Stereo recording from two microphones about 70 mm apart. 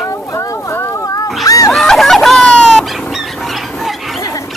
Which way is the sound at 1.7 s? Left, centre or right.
Centre.